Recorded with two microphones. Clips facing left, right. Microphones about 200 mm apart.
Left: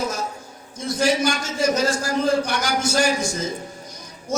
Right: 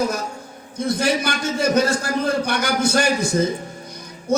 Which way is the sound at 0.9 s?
60° right (ahead or behind).